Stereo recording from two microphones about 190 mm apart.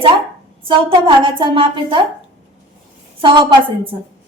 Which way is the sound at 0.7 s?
25° right (ahead or behind).